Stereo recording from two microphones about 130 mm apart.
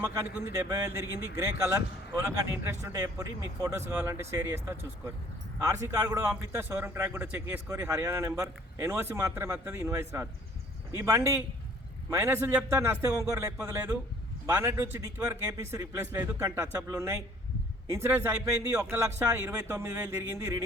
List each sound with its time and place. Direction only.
0.0 s a man's voice: 15° right (ahead or behind)